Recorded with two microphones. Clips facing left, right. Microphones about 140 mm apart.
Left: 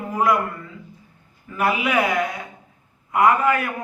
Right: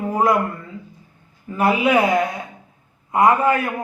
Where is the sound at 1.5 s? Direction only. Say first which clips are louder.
Right 4 dB; 25° right (ahead or behind).